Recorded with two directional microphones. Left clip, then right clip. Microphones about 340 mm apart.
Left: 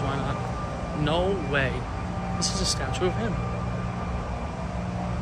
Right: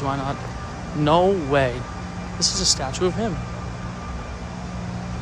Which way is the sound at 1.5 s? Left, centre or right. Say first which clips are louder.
Right 6 dB; centre.